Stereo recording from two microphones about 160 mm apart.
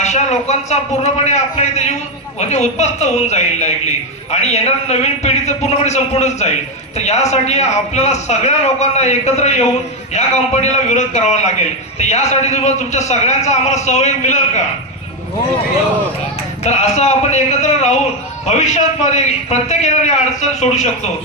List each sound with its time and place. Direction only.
0.0 s a man's voice: 45° left (ahead or behind)
16.6 s a man's voice: 45° left (ahead or behind)